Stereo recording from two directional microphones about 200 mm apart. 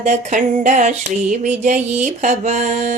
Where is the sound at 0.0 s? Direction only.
35° right (ahead or behind).